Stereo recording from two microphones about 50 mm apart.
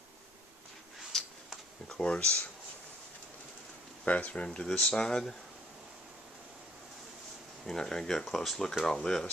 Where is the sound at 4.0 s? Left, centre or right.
Left.